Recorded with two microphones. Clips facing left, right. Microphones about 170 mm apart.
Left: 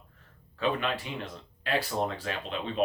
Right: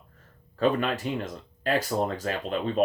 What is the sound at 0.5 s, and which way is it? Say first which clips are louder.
Speech: right 5 dB; 45° right (ahead or behind).